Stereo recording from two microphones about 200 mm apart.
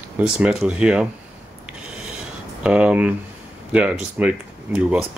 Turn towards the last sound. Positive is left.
turn(degrees=-5)  # may be behind; listen again after turning